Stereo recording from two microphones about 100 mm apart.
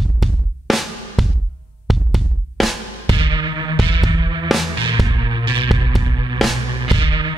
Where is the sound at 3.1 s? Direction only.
55° right (ahead or behind).